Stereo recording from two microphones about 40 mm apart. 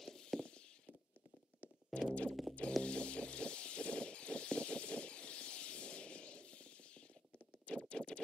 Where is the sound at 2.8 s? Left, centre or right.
Left.